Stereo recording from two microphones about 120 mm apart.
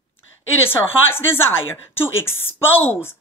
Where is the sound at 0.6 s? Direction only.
20° left (ahead or behind).